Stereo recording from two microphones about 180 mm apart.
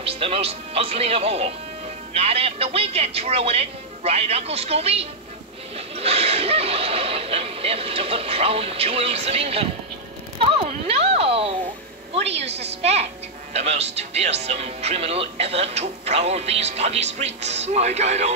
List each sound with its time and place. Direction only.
0.0 s speech: 30° right (ahead or behind)
10.4 s a sound: 30° right (ahead or behind)
12.1 s speech: 35° right (ahead or behind)